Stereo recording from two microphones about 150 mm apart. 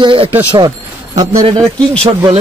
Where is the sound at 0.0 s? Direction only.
35° right (ahead or behind).